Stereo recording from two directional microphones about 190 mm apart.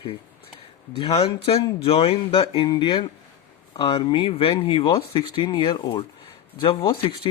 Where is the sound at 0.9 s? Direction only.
25° left (ahead or behind).